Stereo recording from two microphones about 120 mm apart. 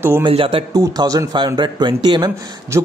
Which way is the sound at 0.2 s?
45° right (ahead or behind).